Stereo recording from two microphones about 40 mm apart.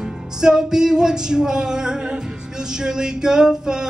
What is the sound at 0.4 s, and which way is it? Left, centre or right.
Music, centre.